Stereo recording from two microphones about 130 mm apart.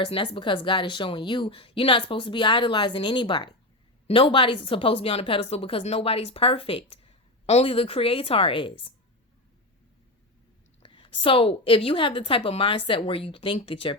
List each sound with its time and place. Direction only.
0.0 s speech: 40° left (ahead or behind)
10.8 s a woman's voice: 40° left (ahead or behind)